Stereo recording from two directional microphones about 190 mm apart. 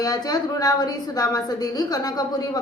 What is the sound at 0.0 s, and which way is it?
A woman's voice, 20° left (ahead or behind).